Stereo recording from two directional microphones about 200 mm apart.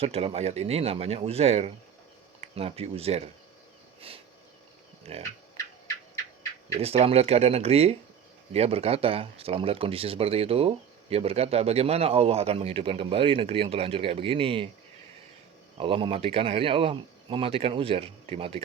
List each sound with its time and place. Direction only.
0.0 s speech: 30° right (ahead or behind)
5.1 s speech: 30° right (ahead or behind)
6.7 s speech: 30° right (ahead or behind)
15.8 s speech: 25° right (ahead or behind)